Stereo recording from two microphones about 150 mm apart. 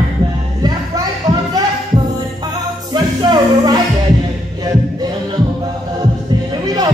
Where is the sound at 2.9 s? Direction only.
30° right (ahead or behind).